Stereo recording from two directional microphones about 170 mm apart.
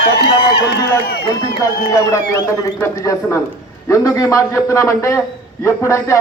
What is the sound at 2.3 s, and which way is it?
A man's voice, 20° left (ahead or behind).